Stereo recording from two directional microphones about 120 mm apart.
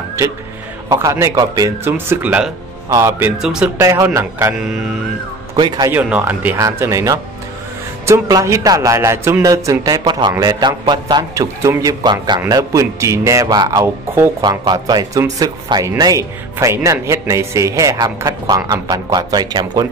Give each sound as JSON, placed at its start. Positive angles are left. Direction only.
{"t": 0.8, "sound": "speech", "side_deg": -30}
{"t": 2.9, "sound": "speech", "side_deg": -20}
{"t": 3.3, "sound": "speech", "side_deg": -5}
{"t": 3.8, "sound": "speech", "side_deg": -25}
{"t": 5.6, "sound": "speech", "side_deg": -40}
{"t": 5.9, "sound": "speech", "side_deg": -15}
{"t": 10.3, "sound": "speech", "side_deg": -20}
{"t": 10.6, "sound": "speech", "side_deg": -35}
{"t": 14.4, "sound": "speech", "side_deg": -35}